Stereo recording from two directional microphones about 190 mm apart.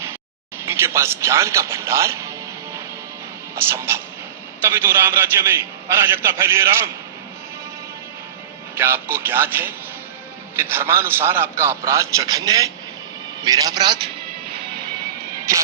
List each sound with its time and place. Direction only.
0.6 s a man's voice: 15° right (ahead or behind)
3.5 s a man's voice: 15° right (ahead or behind)
8.7 s a man's voice: 10° right (ahead or behind)